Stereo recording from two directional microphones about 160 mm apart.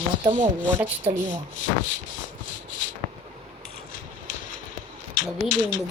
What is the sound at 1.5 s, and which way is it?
Speech, 50° left (ahead or behind).